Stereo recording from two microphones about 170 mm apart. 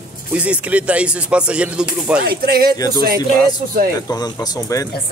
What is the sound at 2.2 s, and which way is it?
Speech, 65° right (ahead or behind).